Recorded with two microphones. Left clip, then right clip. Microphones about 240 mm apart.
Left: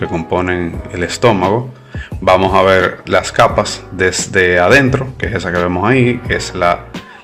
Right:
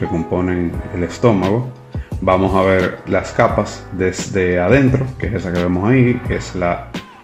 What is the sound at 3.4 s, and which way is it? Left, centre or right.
Speech, left.